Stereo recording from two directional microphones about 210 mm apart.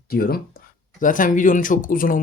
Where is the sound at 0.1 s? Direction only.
45° left (ahead or behind).